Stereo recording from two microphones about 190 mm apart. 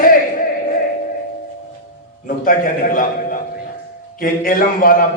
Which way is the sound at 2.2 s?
45° left (ahead or behind).